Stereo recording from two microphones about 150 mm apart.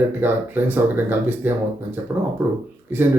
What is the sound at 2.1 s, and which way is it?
Speech, 10° right (ahead or behind).